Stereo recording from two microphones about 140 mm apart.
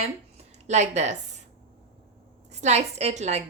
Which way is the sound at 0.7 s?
55° right (ahead or behind).